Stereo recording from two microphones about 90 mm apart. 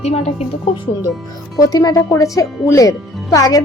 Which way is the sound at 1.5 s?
40° left (ahead or behind).